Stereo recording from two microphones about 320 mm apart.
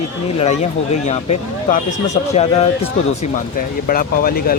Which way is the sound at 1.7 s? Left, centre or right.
Left.